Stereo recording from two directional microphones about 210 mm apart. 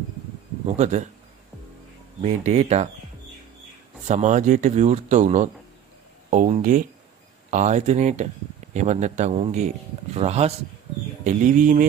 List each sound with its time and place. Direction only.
0.7 s speech: 35° right (ahead or behind)
2.2 s speech: 30° right (ahead or behind)
4.1 s speech: 35° right (ahead or behind)